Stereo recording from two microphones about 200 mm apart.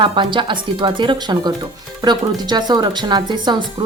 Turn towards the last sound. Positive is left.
turn(degrees=-25)  # may be behind; listen again after turning